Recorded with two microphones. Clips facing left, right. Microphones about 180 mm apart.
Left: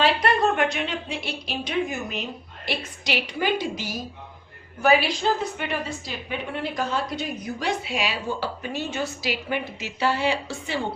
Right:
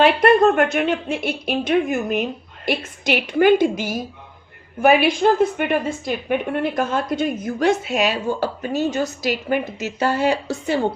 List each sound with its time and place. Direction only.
0.0 s a woman's voice: 50° right (ahead or behind)